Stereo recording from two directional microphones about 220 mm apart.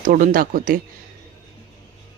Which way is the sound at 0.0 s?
40° right (ahead or behind).